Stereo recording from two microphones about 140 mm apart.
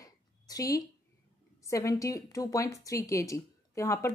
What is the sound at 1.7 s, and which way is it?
A woman's voice, 20° left (ahead or behind).